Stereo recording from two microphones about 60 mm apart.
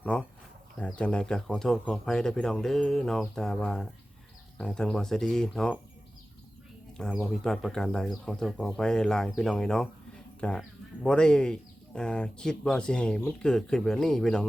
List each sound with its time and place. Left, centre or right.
0.0 s speech: centre
6.9 s speech: centre